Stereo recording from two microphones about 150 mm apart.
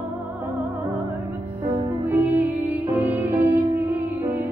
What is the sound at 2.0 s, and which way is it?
Music, 10° right (ahead or behind).